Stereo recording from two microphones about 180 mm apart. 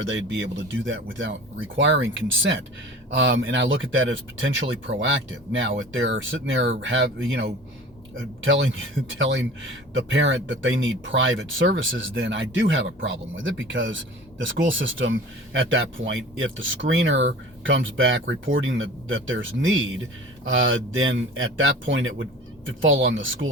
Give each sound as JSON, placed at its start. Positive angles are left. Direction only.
{"t": 0.0, "sound": "speech", "side_deg": -90}
{"t": 8.4, "sound": "speech", "side_deg": -90}